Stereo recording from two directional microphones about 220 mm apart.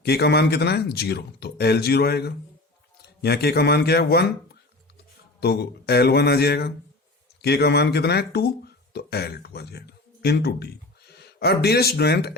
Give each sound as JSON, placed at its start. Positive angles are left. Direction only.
{"t": 0.0, "sound": "a man's voice", "side_deg": 50}
{"t": 5.4, "sound": "a man's voice", "side_deg": 45}